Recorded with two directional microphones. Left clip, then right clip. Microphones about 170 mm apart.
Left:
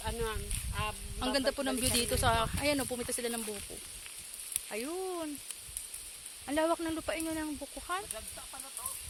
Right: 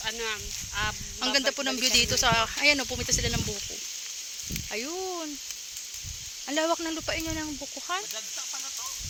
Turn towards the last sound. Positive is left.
turn(degrees=-65)  # may be behind; listen again after turning